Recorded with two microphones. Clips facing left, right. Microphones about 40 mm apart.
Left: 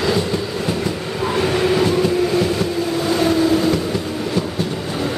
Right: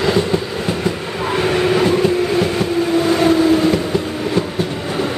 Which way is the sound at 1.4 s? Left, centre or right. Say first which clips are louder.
Right 2 dB; centre.